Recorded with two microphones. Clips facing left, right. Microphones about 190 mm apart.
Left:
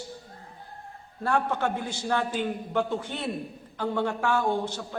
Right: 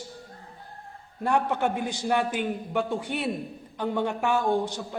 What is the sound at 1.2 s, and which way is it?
A man's voice, 15° right (ahead or behind).